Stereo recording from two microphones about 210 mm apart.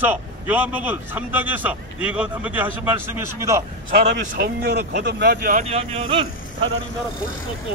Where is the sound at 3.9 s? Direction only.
50° right (ahead or behind).